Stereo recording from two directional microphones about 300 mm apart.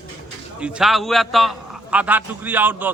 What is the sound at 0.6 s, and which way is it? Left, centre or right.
A man's voice, centre.